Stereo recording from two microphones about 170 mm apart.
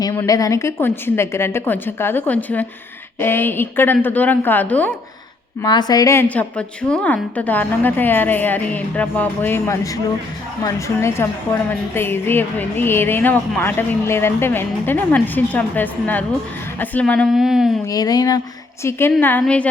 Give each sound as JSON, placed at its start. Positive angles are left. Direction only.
{"t": 0.0, "sound": "a woman's voice", "side_deg": 20}
{"t": 5.6, "sound": "a woman's voice", "side_deg": 25}
{"t": 17.8, "sound": "a woman's voice", "side_deg": 20}